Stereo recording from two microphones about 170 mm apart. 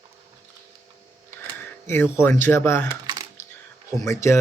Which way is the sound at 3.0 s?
25° right (ahead or behind).